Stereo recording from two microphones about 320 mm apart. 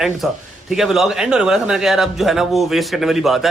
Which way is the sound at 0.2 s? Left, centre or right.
Centre.